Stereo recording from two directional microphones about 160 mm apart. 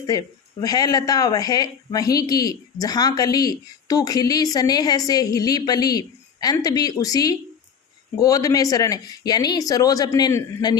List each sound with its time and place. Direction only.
0.1 s speech: 20° left (ahead or behind)